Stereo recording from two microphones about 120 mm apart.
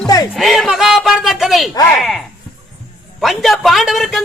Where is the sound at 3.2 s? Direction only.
Centre (ahead or behind).